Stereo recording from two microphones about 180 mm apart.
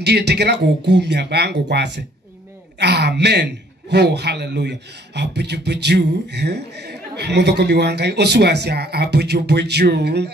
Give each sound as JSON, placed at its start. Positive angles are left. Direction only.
{"t": 0.0, "sound": "a man's voice", "side_deg": -70}